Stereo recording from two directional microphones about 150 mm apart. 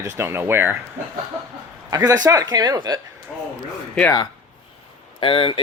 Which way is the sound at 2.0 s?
25° right (ahead or behind).